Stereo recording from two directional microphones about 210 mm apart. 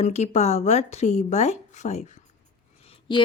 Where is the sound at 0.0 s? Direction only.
30° left (ahead or behind).